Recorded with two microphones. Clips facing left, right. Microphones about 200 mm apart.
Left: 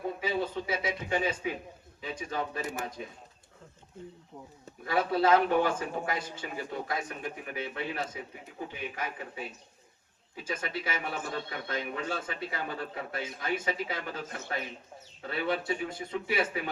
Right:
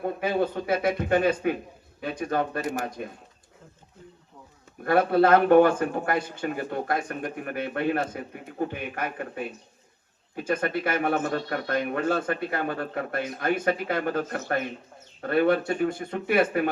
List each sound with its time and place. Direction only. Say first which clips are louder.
0.0 s a man's voice: right 6 dB; 60° right (ahead or behind)
4.8 s a man's voice: right 7 dB; 55° right (ahead or behind)